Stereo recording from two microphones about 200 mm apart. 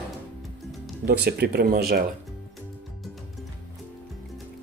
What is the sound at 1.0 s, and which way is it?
Speech, 55° right (ahead or behind).